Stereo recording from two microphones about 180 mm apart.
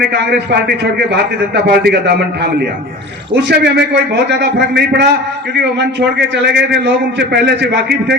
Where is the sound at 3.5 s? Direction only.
65° right (ahead or behind).